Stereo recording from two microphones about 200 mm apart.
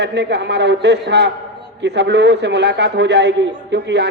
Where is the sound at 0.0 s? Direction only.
60° right (ahead or behind).